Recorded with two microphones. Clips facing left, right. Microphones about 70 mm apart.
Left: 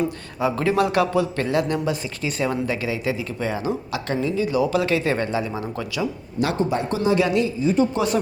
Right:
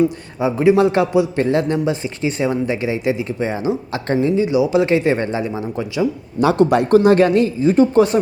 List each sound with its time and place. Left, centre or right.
0.3 s speech: centre
3.9 s speech: right
4.4 s speech: right
6.6 s speech: right